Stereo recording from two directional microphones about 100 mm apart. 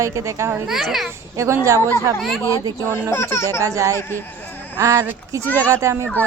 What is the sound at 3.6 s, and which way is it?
A woman's voice, 35° right (ahead or behind).